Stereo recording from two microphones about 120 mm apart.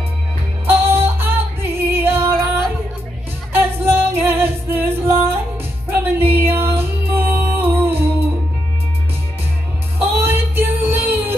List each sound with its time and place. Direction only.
0.7 s music: 20° right (ahead or behind)
9.9 s music: 15° right (ahead or behind)